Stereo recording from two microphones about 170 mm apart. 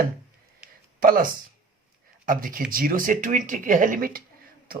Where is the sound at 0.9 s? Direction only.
55° right (ahead or behind).